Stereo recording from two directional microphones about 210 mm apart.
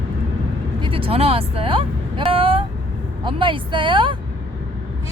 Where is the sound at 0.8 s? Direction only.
25° right (ahead or behind).